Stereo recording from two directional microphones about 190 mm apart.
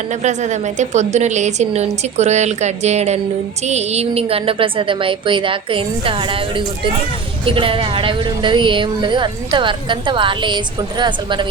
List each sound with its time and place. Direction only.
0.2 s a woman's voice: 40° right (ahead or behind)
7.4 s speech: 30° right (ahead or behind)